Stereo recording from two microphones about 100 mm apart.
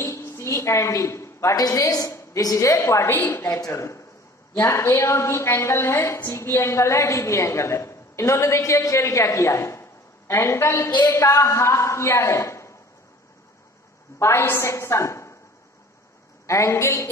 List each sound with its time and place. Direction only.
0.0 s a woman's voice: 25° left (ahead or behind)
3.4 s a woman's voice: 30° left (ahead or behind)
14.1 s a woman's voice: 25° left (ahead or behind)
16.4 s a woman's voice: 30° left (ahead or behind)